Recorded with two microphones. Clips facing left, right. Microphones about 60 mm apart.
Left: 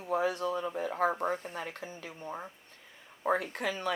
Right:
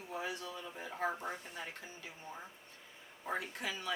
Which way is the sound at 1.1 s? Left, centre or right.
Left.